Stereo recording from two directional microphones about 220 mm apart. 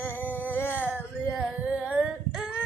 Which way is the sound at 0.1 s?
10° left (ahead or behind).